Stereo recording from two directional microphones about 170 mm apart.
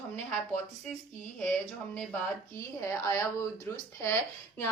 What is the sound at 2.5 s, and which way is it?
Speech, 15° left (ahead or behind).